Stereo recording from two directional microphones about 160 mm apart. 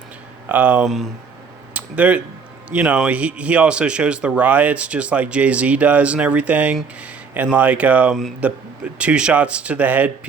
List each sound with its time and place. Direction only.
0.4 s speech: 10° right (ahead or behind)